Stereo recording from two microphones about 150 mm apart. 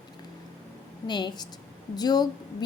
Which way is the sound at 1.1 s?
30° left (ahead or behind).